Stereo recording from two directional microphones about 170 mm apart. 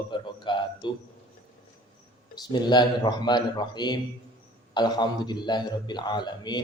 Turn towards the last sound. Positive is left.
turn(degrees=25)  # may be behind; listen again after turning